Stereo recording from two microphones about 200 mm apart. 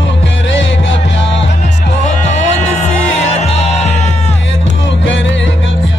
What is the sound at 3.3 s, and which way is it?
Music, 35° left (ahead or behind).